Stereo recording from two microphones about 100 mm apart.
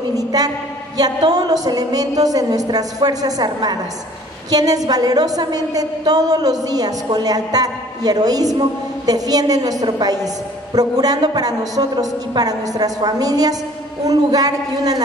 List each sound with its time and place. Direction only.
0.1 s a woman's voice: 40° right (ahead or behind)